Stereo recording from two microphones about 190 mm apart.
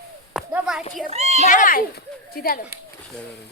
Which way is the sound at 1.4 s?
45° left (ahead or behind).